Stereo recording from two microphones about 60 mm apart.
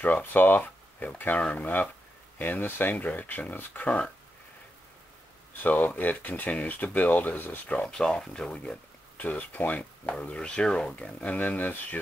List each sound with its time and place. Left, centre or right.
0.0 s speech: left
5.5 s speech: left
7.8 s speech: centre
9.2 s speech: left
11.3 s speech: left